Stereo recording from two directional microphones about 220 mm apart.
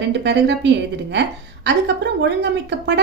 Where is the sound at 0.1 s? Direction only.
50° right (ahead or behind).